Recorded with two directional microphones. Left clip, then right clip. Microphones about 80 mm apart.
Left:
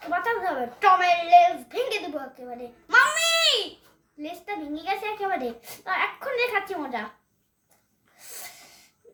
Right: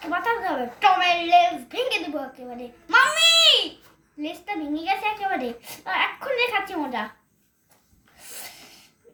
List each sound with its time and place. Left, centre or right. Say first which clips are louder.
0.1 s a child's voice: right 1 dB; left
4.2 s a woman's voice: right 3 dB; left
8.3 s sneeze: right 2 dB; left